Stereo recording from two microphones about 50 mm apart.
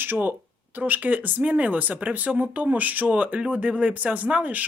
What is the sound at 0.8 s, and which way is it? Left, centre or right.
Speech, right.